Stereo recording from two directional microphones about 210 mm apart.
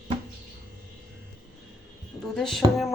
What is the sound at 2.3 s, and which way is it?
Speech, centre (ahead or behind).